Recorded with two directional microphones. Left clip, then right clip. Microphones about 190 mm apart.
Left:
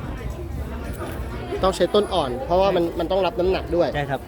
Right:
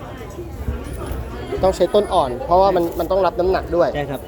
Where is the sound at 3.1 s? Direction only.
10° left (ahead or behind).